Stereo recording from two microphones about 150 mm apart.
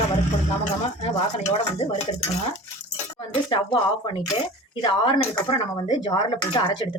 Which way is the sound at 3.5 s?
35° left (ahead or behind).